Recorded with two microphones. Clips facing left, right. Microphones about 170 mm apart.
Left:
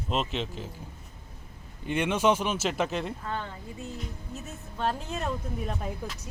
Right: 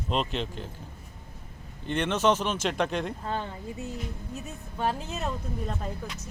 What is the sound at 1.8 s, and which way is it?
Speech, 10° left (ahead or behind).